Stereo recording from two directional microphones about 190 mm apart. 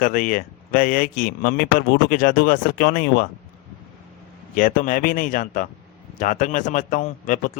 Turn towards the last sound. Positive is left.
turn(degrees=45)  # may be behind; listen again after turning